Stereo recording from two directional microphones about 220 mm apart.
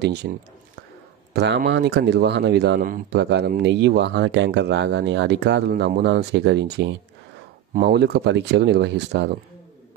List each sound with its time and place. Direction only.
0.0 s speech: 50° right (ahead or behind)
1.3 s speech: 50° right (ahead or behind)